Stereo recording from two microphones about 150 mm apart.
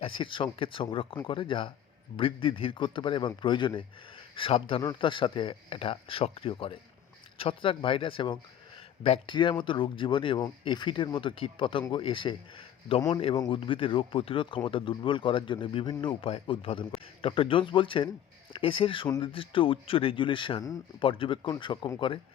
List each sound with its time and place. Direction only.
0.0 s speech: 35° left (ahead or behind)